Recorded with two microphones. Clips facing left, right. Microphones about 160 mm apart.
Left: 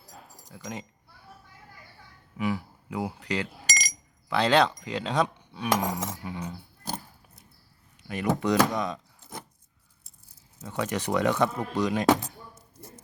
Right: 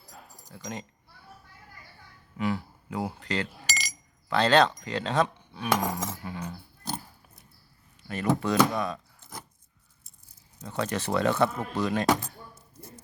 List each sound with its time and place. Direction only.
0.4 s speech: 10° left (ahead or behind)
2.4 s speech: 10° left (ahead or behind)
8.0 s speech: 15° left (ahead or behind)
10.6 s speech: 15° left (ahead or behind)